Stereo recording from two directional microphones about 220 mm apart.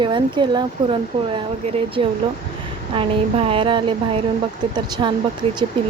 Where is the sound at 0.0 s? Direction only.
20° right (ahead or behind).